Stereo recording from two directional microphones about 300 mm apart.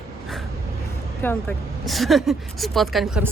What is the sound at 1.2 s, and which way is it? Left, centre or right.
Speech, centre.